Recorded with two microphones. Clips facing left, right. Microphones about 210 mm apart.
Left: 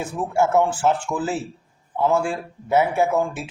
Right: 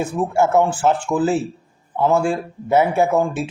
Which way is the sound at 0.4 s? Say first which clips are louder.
Right 2 dB; 40° right (ahead or behind).